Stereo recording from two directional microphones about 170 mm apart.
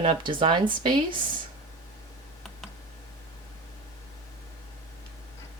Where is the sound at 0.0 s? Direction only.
30° right (ahead or behind).